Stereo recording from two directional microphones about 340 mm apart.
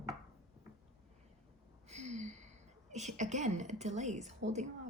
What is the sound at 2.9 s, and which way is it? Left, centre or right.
Speech, centre.